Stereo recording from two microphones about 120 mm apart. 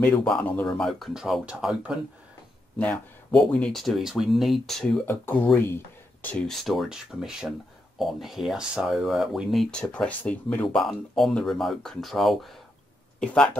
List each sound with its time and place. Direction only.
0.2 s speech: 5° left (ahead or behind)
2.8 s speech: 10° left (ahead or behind)
5.0 s speech: 15° left (ahead or behind)
11.1 s speech: centre (ahead or behind)